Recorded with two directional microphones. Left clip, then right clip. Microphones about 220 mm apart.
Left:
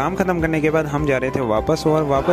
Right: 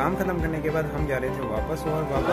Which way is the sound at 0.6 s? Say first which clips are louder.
Left 8 dB; 40° left (ahead or behind).